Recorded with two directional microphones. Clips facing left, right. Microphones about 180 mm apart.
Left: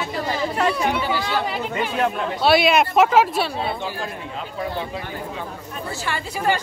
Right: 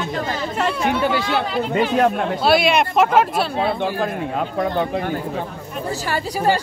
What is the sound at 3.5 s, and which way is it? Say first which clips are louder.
Speech: right 6 dB; 60° right (ahead or behind).